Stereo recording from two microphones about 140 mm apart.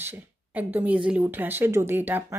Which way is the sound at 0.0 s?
15° right (ahead or behind).